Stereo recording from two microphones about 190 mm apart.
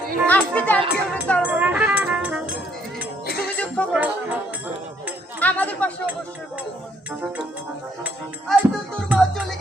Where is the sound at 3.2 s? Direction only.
55° left (ahead or behind).